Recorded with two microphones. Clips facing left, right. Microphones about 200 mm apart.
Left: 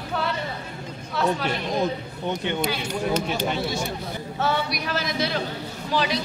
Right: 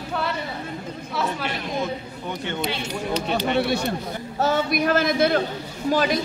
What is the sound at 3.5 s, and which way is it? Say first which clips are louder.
Speech: right 5 dB; 65° right (ahead or behind).